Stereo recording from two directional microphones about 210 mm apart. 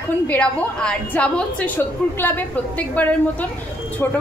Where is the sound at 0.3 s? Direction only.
5° left (ahead or behind).